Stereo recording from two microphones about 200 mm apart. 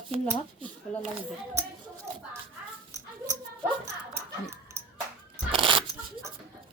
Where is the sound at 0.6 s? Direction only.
Centre (ahead or behind).